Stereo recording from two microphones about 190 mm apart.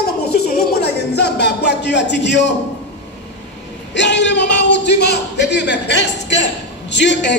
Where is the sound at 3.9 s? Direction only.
70° left (ahead or behind).